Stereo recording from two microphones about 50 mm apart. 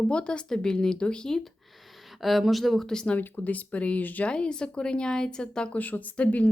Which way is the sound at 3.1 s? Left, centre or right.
Left.